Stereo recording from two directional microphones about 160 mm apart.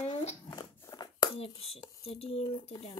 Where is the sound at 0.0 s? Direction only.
45° left (ahead or behind).